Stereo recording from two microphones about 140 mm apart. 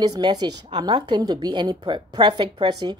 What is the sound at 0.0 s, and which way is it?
A woman's voice, 30° right (ahead or behind).